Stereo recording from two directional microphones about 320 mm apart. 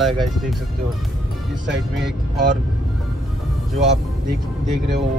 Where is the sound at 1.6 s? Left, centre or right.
Right.